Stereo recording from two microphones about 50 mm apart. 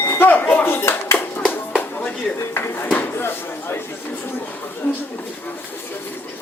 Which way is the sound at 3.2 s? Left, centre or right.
Left.